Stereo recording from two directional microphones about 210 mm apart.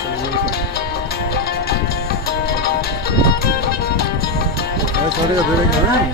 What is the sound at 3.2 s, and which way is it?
Music, 50° left (ahead or behind).